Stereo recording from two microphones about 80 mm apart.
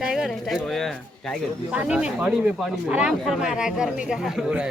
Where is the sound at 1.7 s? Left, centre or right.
Centre.